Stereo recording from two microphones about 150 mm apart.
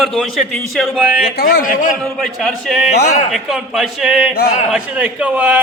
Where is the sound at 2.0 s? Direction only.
Centre (ahead or behind).